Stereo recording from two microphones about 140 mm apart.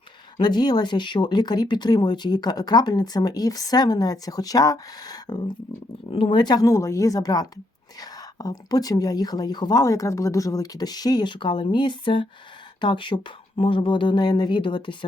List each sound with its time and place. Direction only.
0.3 s speech: 30° left (ahead or behind)
6.1 s speech: 40° left (ahead or behind)